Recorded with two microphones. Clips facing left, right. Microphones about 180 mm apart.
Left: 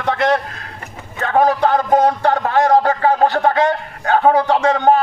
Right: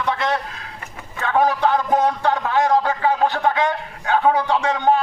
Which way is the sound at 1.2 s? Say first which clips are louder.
Left 3 dB; 45° left (ahead or behind).